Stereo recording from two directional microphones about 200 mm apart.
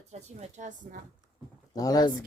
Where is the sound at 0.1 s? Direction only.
35° right (ahead or behind).